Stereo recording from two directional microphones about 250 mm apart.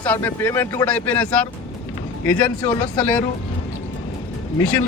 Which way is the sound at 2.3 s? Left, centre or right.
Centre.